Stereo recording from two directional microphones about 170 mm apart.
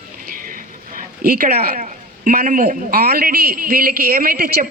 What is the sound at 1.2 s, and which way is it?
Speech, 60° right (ahead or behind).